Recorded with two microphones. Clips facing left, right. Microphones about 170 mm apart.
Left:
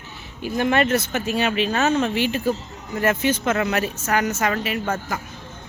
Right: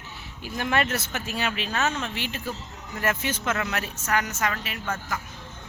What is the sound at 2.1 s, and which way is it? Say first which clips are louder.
Speech: left 11 dB; 5° left (ahead or behind).